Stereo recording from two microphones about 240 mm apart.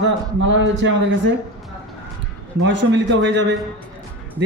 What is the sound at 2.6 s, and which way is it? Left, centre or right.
Speech, right.